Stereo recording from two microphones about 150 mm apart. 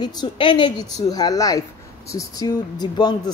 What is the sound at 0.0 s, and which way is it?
Speech, 30° left (ahead or behind).